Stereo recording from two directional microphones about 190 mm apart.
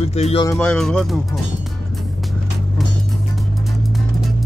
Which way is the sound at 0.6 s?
5° left (ahead or behind).